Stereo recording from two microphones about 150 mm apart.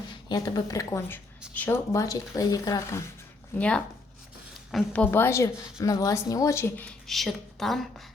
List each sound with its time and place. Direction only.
0.1 s a woman's voice: 25° left (ahead or behind)
3.6 s a woman's voice: 10° left (ahead or behind)
5.1 s speech: 15° left (ahead or behind)
7.1 s a woman's voice: centre (ahead or behind)